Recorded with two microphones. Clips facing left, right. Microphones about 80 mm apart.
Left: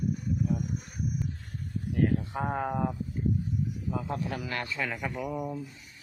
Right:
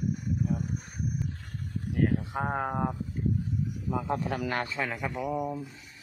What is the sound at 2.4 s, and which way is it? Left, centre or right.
Speech, right.